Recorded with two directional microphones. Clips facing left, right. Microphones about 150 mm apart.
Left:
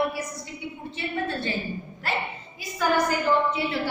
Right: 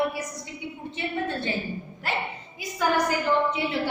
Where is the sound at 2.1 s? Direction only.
15° right (ahead or behind).